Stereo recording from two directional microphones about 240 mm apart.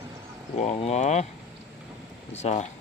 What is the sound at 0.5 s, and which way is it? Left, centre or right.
Speech, left.